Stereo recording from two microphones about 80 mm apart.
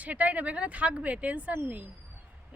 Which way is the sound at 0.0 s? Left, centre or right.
Centre.